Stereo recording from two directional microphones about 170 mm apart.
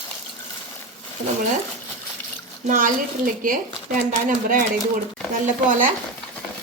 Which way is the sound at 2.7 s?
50° right (ahead or behind).